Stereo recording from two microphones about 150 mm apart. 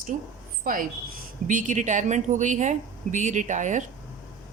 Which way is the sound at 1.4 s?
60° right (ahead or behind).